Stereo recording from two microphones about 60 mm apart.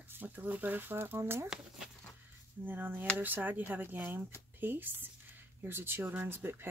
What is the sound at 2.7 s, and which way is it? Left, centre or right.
Speech, right.